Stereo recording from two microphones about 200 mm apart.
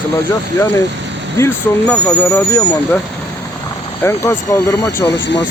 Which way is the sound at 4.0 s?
15° left (ahead or behind).